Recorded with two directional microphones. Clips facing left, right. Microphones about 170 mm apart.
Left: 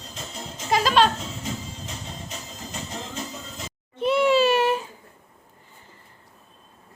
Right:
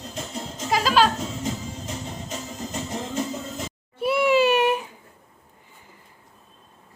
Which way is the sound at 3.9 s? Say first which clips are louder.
Even; 10° right (ahead or behind).